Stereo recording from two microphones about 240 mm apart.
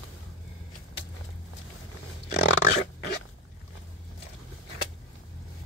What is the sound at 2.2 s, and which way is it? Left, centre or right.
Dog, left.